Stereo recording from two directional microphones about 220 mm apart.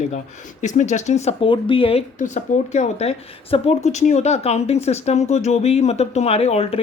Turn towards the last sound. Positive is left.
turn(degrees=30)  # may be behind; listen again after turning